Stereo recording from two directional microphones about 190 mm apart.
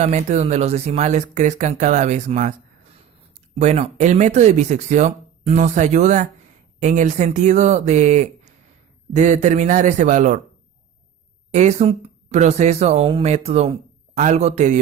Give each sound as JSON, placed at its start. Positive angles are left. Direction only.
{"t": 0.0, "sound": "speech", "side_deg": -35}
{"t": 11.5, "sound": "speech", "side_deg": -35}